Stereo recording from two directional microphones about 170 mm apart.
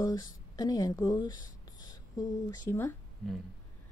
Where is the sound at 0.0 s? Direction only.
20° left (ahead or behind).